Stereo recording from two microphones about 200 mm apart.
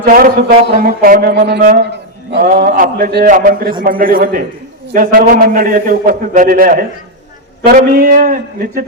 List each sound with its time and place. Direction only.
0.0 s a man's voice: 45° right (ahead or behind)